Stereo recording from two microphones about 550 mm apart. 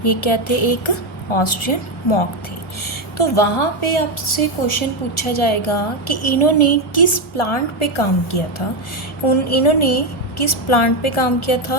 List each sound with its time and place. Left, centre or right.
0.0 s a woman's voice: left
9.2 s a woman's voice: left